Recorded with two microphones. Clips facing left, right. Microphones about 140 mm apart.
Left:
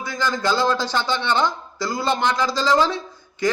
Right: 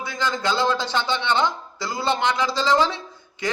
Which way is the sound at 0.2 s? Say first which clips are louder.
Left 2 dB; 20° right (ahead or behind).